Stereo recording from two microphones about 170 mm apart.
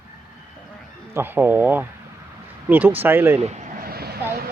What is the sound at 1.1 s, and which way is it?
Speech, 10° right (ahead or behind).